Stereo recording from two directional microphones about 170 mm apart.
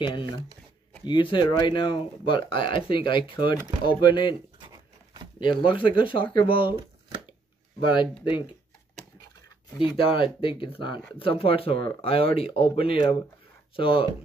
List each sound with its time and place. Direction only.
0.0 s speech: 30° left (ahead or behind)
4.6 s a sound: 25° right (ahead or behind)
5.4 s speech: 30° left (ahead or behind)
9.8 s speech: 30° left (ahead or behind)